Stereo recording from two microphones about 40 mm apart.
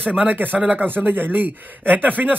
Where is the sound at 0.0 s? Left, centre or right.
Right.